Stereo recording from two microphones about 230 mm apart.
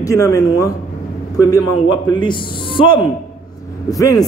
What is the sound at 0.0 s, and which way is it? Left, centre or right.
A man's voice, centre.